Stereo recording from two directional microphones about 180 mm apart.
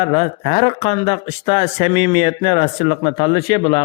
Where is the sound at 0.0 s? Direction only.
35° left (ahead or behind).